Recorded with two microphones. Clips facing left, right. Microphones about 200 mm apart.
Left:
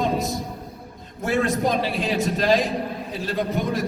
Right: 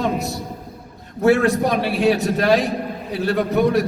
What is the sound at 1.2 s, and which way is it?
A man's voice, 70° right (ahead or behind).